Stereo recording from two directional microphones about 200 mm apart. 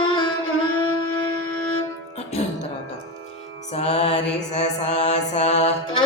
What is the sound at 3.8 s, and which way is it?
Mantra, 30° left (ahead or behind).